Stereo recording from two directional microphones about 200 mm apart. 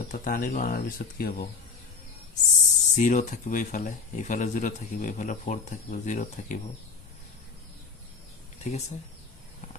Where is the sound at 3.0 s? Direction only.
40° left (ahead or behind).